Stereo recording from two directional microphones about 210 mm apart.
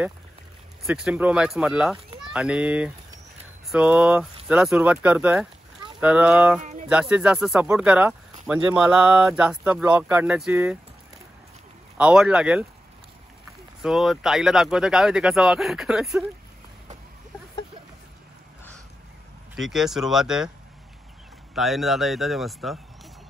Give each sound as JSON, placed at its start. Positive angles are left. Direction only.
{"t": 0.8, "sound": "speech", "side_deg": -5}
{"t": 6.6, "sound": "speech", "side_deg": -35}
{"t": 6.9, "sound": "speech", "side_deg": -5}
{"t": 12.0, "sound": "speech", "side_deg": -5}
{"t": 13.8, "sound": "speech", "side_deg": 0}
{"t": 19.5, "sound": "speech", "side_deg": 0}
{"t": 21.5, "sound": "speech", "side_deg": 0}